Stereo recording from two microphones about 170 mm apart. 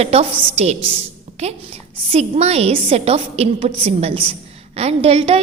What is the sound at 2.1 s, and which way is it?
A woman's voice, 40° right (ahead or behind).